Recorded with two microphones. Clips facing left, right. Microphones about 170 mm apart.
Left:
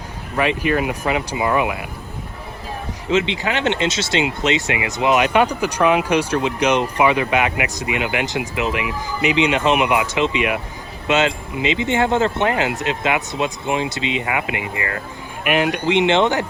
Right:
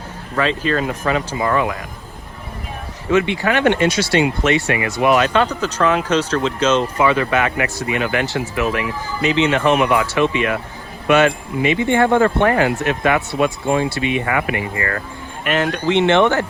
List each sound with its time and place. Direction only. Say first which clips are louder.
0.3 s speech: even; 15° left (ahead or behind)
3.1 s speech: right 3 dB; 20° left (ahead or behind)